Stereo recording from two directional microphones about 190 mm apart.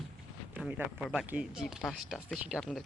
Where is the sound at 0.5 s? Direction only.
5° right (ahead or behind).